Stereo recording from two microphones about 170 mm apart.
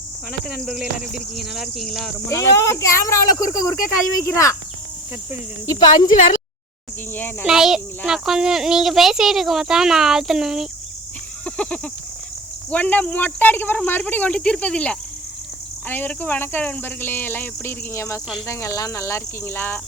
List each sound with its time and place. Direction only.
0.3 s a child's voice: centre (ahead or behind)
2.3 s speech: 15° left (ahead or behind)
5.6 s speech: 25° left (ahead or behind)
6.1 s speech: 45° left (ahead or behind)
7.1 s speech: 10° left (ahead or behind)
7.4 s a child's voice: 5° right (ahead or behind)
11.4 s a sound: 5° left (ahead or behind)
12.7 s speech: 10° left (ahead or behind)